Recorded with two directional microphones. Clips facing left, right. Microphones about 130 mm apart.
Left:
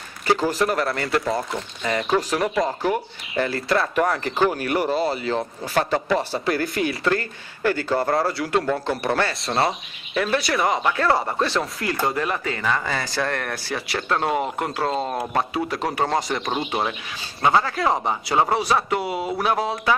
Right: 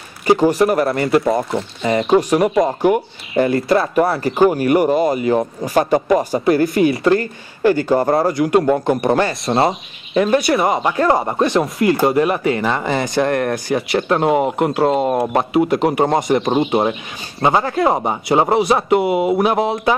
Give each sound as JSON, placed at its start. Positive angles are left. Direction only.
{"t": 0.8, "sound": "speech", "side_deg": -20}
{"t": 2.8, "sound": "speech", "side_deg": -15}
{"t": 4.0, "sound": "speech", "side_deg": -10}